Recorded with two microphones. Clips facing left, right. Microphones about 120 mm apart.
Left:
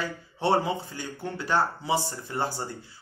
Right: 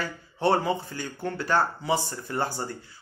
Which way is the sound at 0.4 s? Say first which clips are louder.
Right 1 dB; 20° left (ahead or behind).